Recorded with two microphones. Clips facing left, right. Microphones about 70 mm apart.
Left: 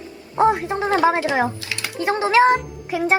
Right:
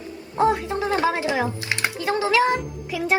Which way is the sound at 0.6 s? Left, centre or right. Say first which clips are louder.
Left 4 dB; left.